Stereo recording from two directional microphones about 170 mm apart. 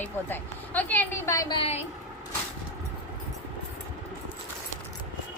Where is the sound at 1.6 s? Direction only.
40° left (ahead or behind).